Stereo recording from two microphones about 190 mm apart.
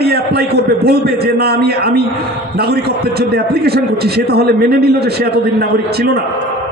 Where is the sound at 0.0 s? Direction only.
55° right (ahead or behind).